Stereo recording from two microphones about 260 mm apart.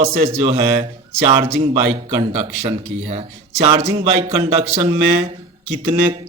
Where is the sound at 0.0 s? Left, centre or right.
Right.